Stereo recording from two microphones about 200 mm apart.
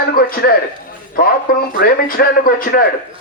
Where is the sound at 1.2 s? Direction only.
45° left (ahead or behind).